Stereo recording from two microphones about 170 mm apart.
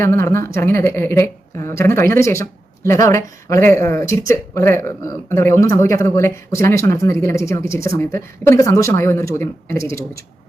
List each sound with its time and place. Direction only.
0.0 s speech: 15° left (ahead or behind)